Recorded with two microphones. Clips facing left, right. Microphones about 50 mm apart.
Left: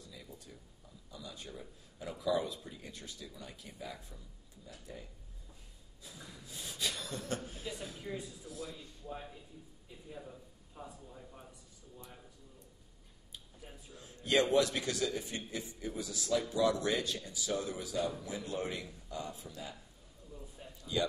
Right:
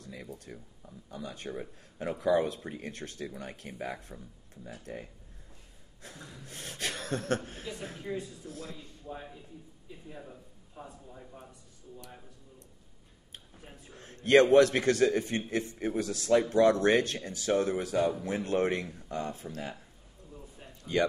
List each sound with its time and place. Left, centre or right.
0.0 s a man's voice: right
10.0 s a man's voice: centre
13.8 s a man's voice: right
20.6 s a sound: right